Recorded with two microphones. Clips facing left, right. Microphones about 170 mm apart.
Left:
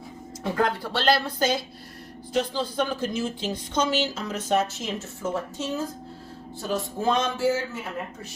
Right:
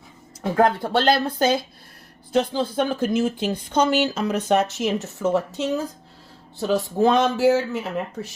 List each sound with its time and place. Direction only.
0.5 s a man's voice: 50° right (ahead or behind); by 7.8 s 70° right (ahead or behind)